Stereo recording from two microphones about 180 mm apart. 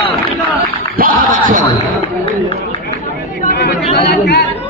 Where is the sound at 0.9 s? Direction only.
50° right (ahead or behind).